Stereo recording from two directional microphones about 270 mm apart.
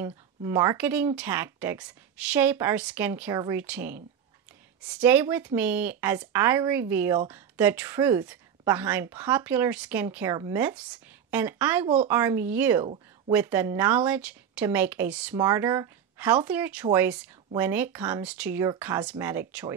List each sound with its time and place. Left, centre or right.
0.0 s speech: centre